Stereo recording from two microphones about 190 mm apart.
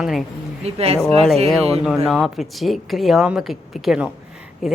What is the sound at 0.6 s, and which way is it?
Speech, 35° right (ahead or behind).